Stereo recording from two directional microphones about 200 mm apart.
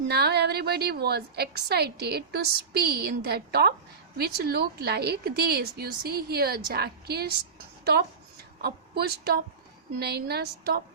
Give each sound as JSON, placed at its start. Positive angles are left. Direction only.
{"t": 0.1, "sound": "a woman's voice", "side_deg": -55}
{"t": 8.6, "sound": "a woman's voice", "side_deg": -50}